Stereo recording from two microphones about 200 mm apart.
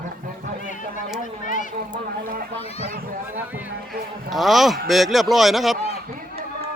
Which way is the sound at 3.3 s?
10° right (ahead or behind).